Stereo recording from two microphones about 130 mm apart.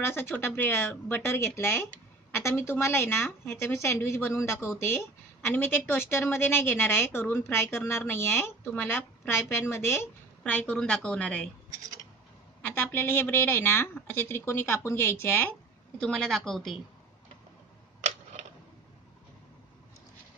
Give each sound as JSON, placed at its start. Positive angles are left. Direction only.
{"t": 0.0, "sound": "a woman's voice", "side_deg": 20}
{"t": 12.6, "sound": "a woman's voice", "side_deg": 15}
{"t": 16.0, "sound": "a woman's voice", "side_deg": 5}